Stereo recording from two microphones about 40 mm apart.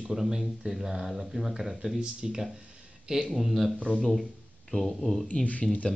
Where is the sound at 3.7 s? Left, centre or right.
Left.